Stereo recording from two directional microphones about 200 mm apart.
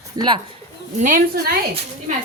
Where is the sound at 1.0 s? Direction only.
40° right (ahead or behind).